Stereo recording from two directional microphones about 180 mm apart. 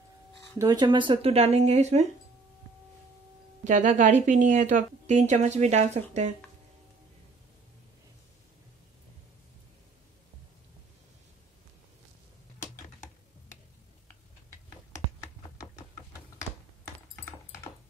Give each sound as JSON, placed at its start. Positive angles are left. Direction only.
{"t": 0.6, "sound": "a woman's voice", "side_deg": -20}
{"t": 3.6, "sound": "a woman's voice", "side_deg": -40}